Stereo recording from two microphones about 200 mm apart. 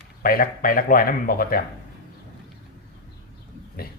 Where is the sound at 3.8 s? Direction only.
50° left (ahead or behind).